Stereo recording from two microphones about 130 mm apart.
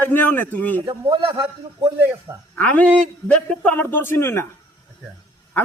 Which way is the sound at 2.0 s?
15° right (ahead or behind).